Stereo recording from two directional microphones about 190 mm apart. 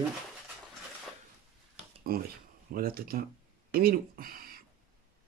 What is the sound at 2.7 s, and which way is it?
Speech, 50° right (ahead or behind).